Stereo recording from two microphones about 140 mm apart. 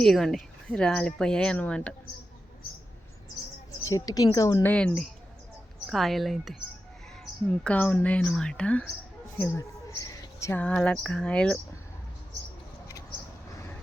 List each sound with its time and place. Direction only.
0.0 s speech: centre (ahead or behind)
3.8 s a woman's voice: 25° left (ahead or behind)
4.6 s speech: 10° left (ahead or behind)
9.4 s a sound: 20° left (ahead or behind)
10.6 s speech: 10° left (ahead or behind)